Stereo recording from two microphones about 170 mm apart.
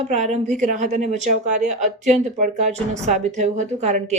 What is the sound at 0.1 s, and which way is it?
Speech, 45° right (ahead or behind).